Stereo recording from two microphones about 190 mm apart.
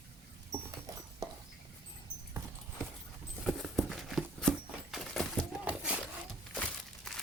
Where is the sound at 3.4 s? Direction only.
Centre (ahead or behind).